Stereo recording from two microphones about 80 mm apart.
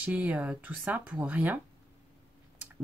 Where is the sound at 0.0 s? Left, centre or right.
Centre.